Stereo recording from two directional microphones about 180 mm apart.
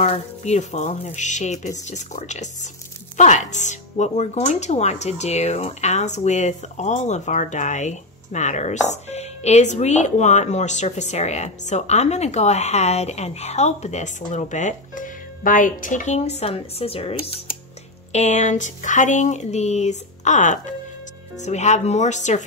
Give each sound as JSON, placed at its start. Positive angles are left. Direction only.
{"t": 0.0, "sound": "speech", "side_deg": 35}